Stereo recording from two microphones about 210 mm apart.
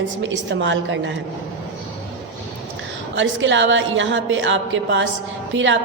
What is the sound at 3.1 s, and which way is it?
A woman's voice, 65° right (ahead or behind).